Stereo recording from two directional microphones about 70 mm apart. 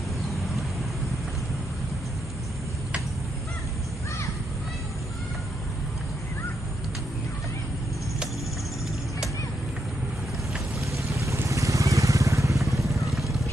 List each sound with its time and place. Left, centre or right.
10.9 s vehicle: right
12.9 s vehicle: centre